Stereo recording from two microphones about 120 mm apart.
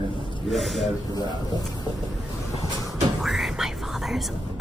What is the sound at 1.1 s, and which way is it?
Speech, 35° left (ahead or behind).